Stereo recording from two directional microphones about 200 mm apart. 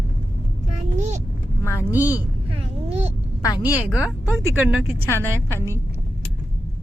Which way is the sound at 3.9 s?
5° right (ahead or behind).